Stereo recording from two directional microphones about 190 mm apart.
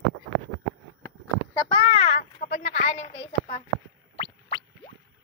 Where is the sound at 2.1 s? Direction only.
45° left (ahead or behind); by 4.6 s 30° left (ahead or behind).